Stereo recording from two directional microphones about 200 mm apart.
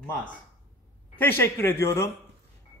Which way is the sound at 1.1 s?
10° left (ahead or behind).